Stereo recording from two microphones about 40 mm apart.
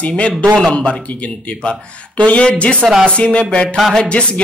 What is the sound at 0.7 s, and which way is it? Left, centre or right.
Speech, left.